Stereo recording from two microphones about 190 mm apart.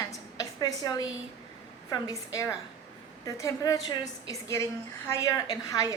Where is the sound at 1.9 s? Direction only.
20° left (ahead or behind).